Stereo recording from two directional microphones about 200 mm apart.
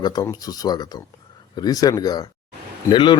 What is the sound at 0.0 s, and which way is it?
Speech, 20° left (ahead or behind).